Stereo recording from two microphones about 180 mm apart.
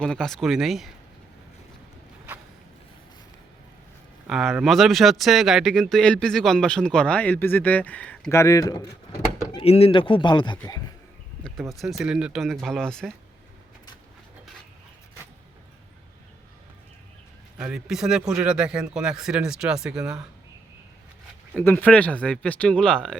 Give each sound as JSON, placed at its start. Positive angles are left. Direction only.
{"t": 0.0, "sound": "speech", "side_deg": 5}
{"t": 4.3, "sound": "speech", "side_deg": 0}
{"t": 9.6, "sound": "speech", "side_deg": 35}
{"t": 11.7, "sound": "speech", "side_deg": 0}
{"t": 17.6, "sound": "speech", "side_deg": -5}
{"t": 21.5, "sound": "speech", "side_deg": 10}